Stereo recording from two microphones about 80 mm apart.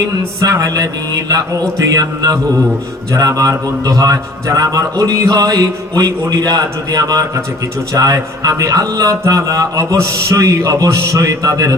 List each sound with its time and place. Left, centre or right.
0.3 s a man's voice: right